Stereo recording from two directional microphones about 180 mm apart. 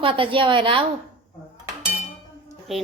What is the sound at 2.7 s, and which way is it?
Speech, centre (ahead or behind).